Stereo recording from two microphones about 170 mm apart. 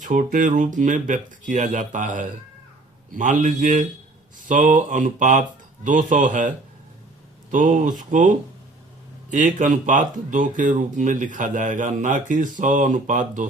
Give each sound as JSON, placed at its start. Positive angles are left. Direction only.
{"t": 0.0, "sound": "speech", "side_deg": -50}
{"t": 7.5, "sound": "speech", "side_deg": -50}